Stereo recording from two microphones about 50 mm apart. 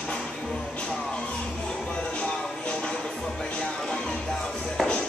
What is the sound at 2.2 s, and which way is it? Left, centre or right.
Music, left.